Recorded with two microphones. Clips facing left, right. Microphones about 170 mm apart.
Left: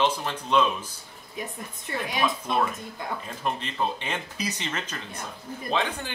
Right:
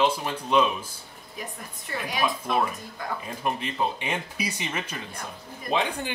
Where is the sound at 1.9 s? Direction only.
25° left (ahead or behind).